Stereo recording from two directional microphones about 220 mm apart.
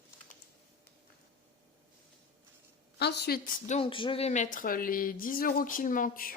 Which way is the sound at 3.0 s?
50° left (ahead or behind).